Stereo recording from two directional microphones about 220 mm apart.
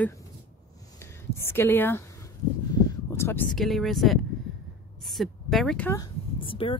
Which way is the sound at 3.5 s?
Centre (ahead or behind).